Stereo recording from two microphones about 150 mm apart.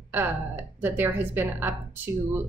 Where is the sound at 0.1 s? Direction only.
15° right (ahead or behind).